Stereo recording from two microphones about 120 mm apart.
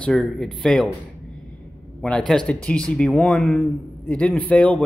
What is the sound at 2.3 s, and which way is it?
A man's voice, 5° left (ahead or behind).